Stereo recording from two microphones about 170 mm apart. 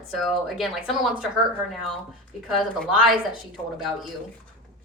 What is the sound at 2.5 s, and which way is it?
Speech, centre (ahead or behind).